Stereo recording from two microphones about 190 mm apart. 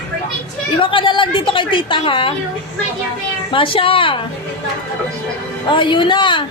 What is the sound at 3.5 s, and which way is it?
Speech, 25° left (ahead or behind).